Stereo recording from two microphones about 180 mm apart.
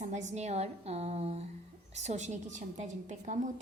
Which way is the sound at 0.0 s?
40° right (ahead or behind).